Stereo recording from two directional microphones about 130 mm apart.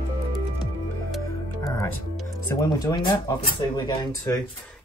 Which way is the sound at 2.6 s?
35° left (ahead or behind).